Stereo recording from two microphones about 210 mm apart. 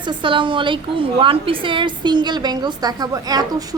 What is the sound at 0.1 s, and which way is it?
A woman's voice, 25° right (ahead or behind).